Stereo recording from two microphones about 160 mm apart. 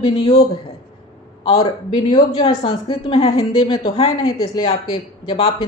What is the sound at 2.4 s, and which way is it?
Speech, 40° left (ahead or behind).